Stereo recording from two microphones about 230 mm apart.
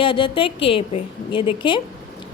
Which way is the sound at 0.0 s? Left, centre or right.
Left.